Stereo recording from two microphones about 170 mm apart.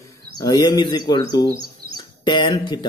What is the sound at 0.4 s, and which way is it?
Speech, 25° left (ahead or behind).